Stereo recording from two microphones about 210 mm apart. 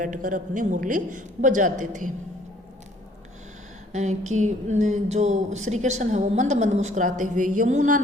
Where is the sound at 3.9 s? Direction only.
35° right (ahead or behind).